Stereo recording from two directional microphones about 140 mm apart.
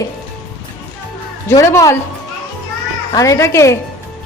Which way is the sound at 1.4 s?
20° left (ahead or behind).